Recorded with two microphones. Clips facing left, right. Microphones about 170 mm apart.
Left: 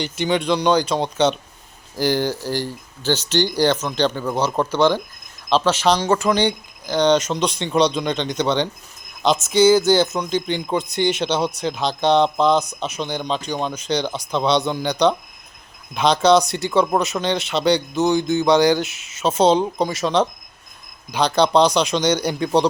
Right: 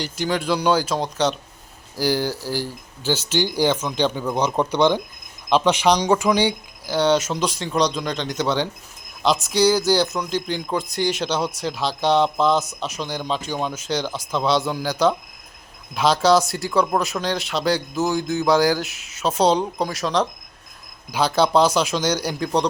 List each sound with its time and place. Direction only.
0.0 s speech: centre (ahead or behind)